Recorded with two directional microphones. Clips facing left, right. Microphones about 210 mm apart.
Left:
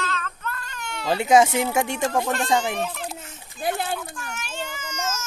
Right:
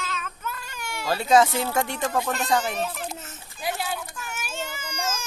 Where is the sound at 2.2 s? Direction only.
Centre (ahead or behind).